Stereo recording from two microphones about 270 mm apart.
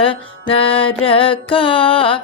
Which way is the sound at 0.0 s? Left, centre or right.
Centre.